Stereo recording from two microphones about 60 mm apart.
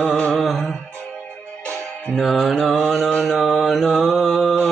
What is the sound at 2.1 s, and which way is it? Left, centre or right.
Music, centre.